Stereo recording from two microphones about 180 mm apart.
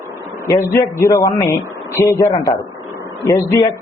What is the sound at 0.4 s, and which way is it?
A man's voice, 15° left (ahead or behind).